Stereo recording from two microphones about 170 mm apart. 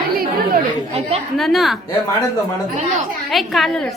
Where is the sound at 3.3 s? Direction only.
Centre (ahead or behind).